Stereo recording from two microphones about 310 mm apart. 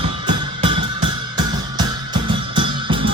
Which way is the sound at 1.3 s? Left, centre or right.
Centre.